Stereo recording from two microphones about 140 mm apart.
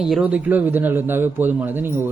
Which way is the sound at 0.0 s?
5° right (ahead or behind).